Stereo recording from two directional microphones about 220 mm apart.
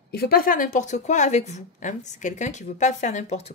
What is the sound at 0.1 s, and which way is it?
A woman's voice, 45° left (ahead or behind).